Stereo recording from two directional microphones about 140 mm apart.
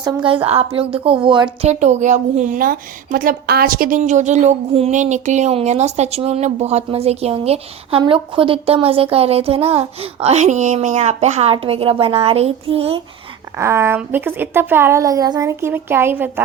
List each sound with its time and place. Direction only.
0.3 s a woman's voice: 45° right (ahead or behind)
1.6 s a woman's voice: 55° right (ahead or behind)
11.5 s a woman's voice: 40° right (ahead or behind)
13.6 s a woman's voice: 20° right (ahead or behind)